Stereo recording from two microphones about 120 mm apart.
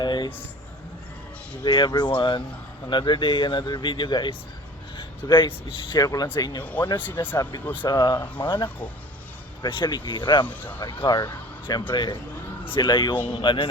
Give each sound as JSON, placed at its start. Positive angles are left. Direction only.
{"t": 0.0, "sound": "a sound", "side_deg": 40}
{"t": 1.6, "sound": "speech", "side_deg": 40}
{"t": 6.0, "sound": "speech", "side_deg": 30}
{"t": 6.6, "sound": "speech", "side_deg": 15}
{"t": 7.9, "sound": "speech", "side_deg": 40}
{"t": 10.4, "sound": "speech", "side_deg": 15}
{"t": 10.8, "sound": "speech", "side_deg": 40}